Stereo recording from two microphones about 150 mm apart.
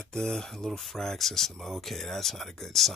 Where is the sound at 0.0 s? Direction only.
5° left (ahead or behind).